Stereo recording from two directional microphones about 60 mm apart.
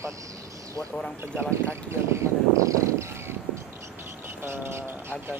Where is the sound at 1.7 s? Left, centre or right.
Right.